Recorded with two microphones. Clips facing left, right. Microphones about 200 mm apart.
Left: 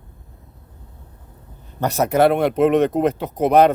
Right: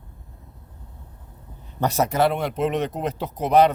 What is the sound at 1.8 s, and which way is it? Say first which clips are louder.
Speech: left 4 dB; 60° left (ahead or behind).